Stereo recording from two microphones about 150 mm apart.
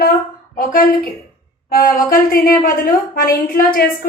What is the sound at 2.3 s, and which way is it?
A woman's voice, 70° left (ahead or behind).